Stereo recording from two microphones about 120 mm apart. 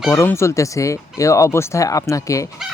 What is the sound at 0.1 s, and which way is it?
Speech, 20° left (ahead or behind).